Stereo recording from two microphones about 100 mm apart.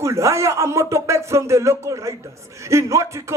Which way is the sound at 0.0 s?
30° right (ahead or behind).